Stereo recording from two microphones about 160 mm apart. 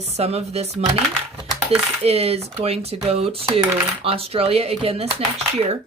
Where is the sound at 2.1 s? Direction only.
40° right (ahead or behind).